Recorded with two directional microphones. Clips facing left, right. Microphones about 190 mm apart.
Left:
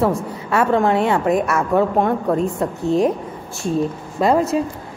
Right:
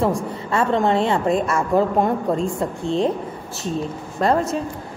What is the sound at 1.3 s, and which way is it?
A woman's voice, 5° left (ahead or behind).